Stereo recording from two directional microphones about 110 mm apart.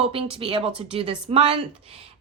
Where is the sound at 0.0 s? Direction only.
55° right (ahead or behind).